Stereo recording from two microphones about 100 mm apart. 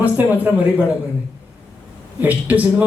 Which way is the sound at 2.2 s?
15° right (ahead or behind).